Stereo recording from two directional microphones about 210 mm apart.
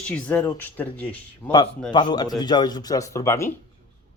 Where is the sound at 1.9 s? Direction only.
20° left (ahead or behind).